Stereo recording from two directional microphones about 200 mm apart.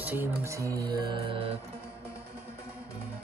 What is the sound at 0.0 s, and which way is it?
Speech, 10° right (ahead or behind).